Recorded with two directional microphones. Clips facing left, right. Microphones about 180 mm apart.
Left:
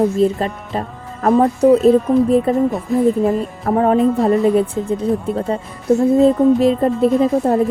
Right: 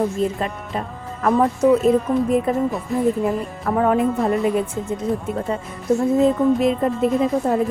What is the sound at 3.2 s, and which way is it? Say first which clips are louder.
Music: left 4 dB; 25° left (ahead or behind).